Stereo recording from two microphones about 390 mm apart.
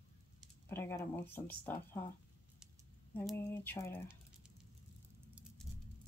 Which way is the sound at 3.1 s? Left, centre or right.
Centre.